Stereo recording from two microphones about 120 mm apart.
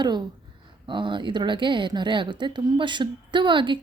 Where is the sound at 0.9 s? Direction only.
40° right (ahead or behind).